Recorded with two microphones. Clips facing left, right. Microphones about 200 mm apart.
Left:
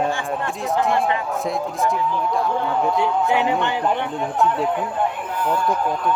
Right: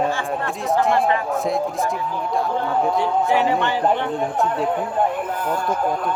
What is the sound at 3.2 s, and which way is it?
Speech, 20° left (ahead or behind).